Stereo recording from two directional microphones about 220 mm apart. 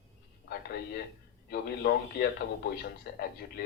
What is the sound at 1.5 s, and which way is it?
Speech, 45° left (ahead or behind).